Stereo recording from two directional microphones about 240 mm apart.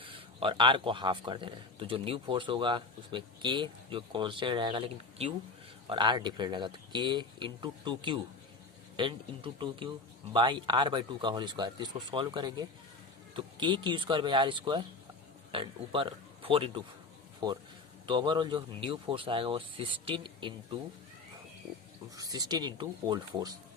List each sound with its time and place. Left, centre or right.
0.0 s a man's voice: right
22.1 s speech: centre